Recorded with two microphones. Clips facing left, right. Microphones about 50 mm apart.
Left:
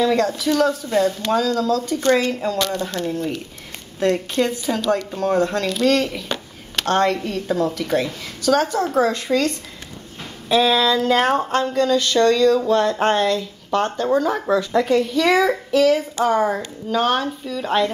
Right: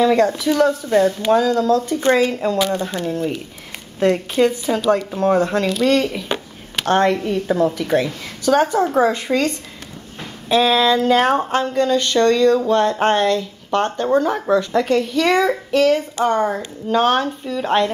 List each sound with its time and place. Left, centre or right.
0.0 s a woman's voice: centre
10.5 s speech: centre